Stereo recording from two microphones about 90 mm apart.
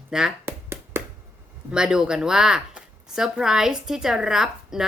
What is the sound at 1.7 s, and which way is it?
A woman's voice, 10° right (ahead or behind).